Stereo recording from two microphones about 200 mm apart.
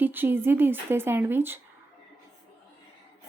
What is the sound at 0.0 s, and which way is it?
A woman's voice, 10° right (ahead or behind).